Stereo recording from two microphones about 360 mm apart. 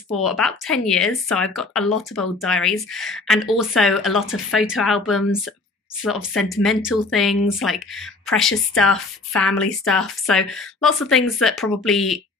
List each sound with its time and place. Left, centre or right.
0.1 s speech: centre